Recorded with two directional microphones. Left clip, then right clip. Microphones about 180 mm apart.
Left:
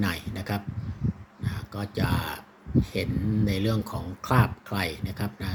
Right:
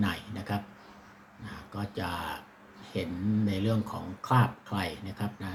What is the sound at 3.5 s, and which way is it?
Speech, 45° left (ahead or behind).